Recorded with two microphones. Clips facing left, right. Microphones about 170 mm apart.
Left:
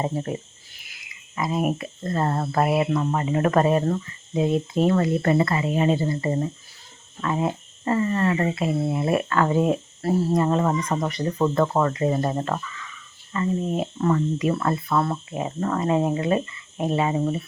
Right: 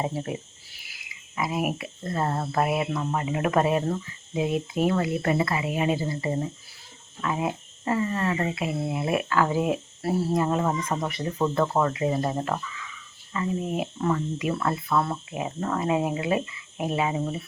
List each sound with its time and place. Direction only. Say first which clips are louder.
0.0 s speech: left 3 dB; 5° right (ahead or behind)
3.3 s speech: left 3 dB; 5° right (ahead or behind)